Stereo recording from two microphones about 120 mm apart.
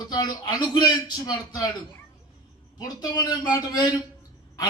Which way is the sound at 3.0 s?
30° left (ahead or behind).